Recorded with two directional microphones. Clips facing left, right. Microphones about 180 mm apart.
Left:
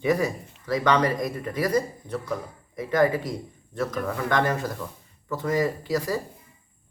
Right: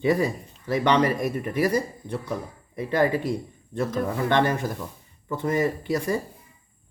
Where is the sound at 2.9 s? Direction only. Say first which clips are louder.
Even; 30° right (ahead or behind).